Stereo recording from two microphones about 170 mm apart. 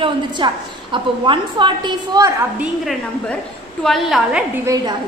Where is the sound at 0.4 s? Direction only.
25° right (ahead or behind).